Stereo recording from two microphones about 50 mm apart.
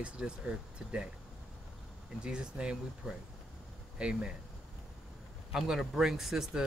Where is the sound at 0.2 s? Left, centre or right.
Centre.